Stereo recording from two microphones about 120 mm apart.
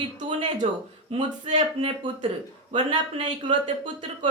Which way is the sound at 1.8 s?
45° right (ahead or behind).